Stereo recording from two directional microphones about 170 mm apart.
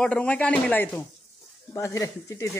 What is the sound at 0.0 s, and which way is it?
Speech, 5° left (ahead or behind).